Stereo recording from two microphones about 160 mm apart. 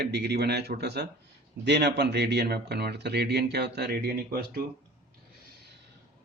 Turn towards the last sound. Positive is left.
turn(degrees=-65)  # may be behind; listen again after turning